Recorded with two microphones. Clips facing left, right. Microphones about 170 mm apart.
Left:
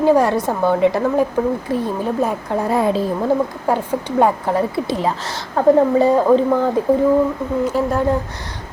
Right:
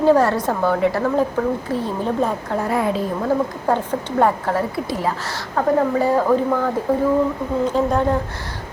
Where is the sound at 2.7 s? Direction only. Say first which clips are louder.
Left 4 dB; 30° left (ahead or behind).